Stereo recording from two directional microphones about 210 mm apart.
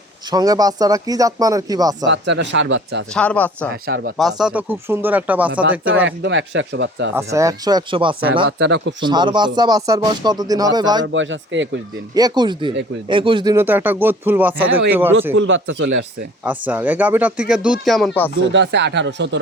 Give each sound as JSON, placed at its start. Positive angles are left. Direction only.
{"t": 0.3, "sound": "speech", "side_deg": -20}
{"t": 2.0, "sound": "speech", "side_deg": -55}
{"t": 3.2, "sound": "speech", "side_deg": 5}
{"t": 3.8, "sound": "speech", "side_deg": -45}
{"t": 4.2, "sound": "speech", "side_deg": 0}
{"t": 6.1, "sound": "speech", "side_deg": -60}
{"t": 7.2, "sound": "speech", "side_deg": -15}
{"t": 8.4, "sound": "speech", "side_deg": -55}
{"t": 9.0, "sound": "speech", "side_deg": -20}
{"t": 11.0, "sound": "speech", "side_deg": -65}
{"t": 12.1, "sound": "speech", "side_deg": -20}
{"t": 15.3, "sound": "speech", "side_deg": -65}
{"t": 16.4, "sound": "speech", "side_deg": -5}
{"t": 18.5, "sound": "speech", "side_deg": -55}